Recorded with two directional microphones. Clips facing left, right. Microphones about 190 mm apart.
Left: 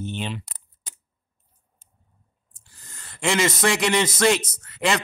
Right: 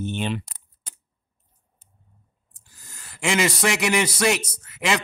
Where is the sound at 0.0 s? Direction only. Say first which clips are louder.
Right 4 dB; 50° right (ahead or behind).